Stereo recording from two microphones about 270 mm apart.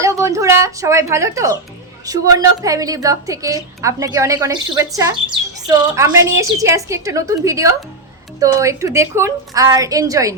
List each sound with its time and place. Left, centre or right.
0.0 s a woman's voice: centre